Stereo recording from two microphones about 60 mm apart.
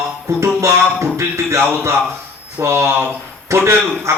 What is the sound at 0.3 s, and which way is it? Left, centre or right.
Music, right.